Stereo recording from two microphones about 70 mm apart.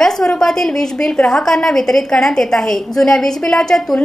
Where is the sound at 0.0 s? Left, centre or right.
Centre.